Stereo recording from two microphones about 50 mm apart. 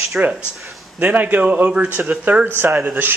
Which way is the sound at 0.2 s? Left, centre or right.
Centre.